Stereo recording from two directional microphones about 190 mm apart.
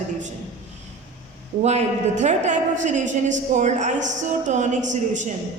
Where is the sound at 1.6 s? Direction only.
35° right (ahead or behind).